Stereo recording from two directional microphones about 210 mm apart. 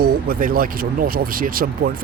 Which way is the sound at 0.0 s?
40° right (ahead or behind).